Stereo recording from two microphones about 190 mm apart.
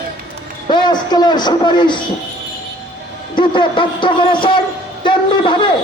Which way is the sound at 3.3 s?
25° left (ahead or behind).